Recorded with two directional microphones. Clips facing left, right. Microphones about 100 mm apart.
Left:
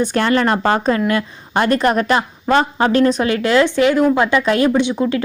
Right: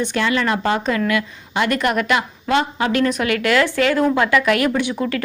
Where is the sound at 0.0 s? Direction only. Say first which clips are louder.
Left 4 dB; 40° left (ahead or behind).